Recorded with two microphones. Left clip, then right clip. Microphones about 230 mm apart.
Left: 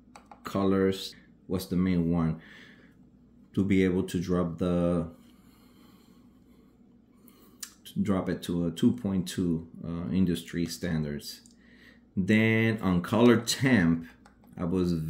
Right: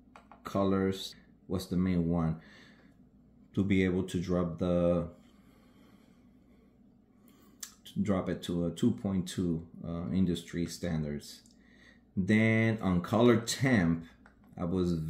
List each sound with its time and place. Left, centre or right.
0.5 s speech: centre
7.6 s speech: centre